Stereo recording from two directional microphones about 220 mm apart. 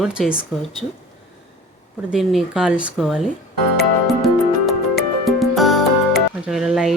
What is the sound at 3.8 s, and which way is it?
Music, centre (ahead or behind).